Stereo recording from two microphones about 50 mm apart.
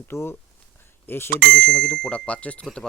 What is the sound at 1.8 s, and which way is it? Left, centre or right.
Speech, centre.